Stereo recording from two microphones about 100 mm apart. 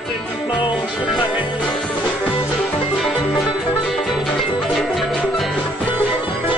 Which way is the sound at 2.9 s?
Centre (ahead or behind).